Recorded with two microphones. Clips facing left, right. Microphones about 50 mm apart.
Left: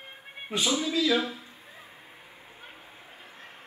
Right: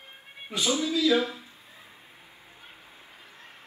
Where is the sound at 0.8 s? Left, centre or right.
Left.